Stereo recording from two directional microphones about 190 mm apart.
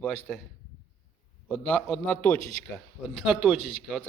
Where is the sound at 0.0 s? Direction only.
5° left (ahead or behind).